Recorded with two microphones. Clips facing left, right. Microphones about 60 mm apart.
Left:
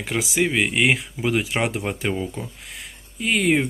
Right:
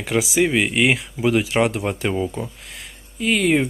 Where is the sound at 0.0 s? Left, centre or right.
Centre.